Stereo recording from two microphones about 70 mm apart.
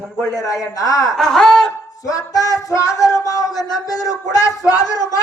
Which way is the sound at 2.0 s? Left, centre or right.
Left.